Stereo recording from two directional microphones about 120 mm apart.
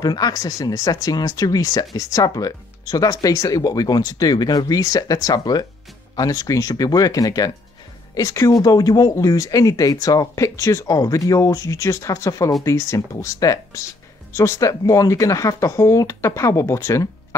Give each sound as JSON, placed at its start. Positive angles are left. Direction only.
{"t": 0.0, "sound": "speech", "side_deg": 35}